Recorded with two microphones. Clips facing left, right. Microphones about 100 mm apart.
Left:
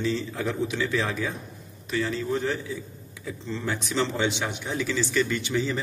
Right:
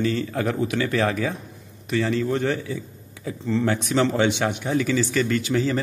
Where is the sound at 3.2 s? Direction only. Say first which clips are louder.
Right 8 dB; 60° right (ahead or behind).